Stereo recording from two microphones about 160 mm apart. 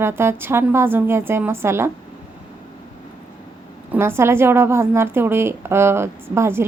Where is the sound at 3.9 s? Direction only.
15° right (ahead or behind).